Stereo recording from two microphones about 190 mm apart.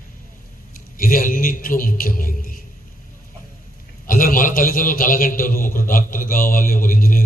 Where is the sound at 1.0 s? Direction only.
45° left (ahead or behind).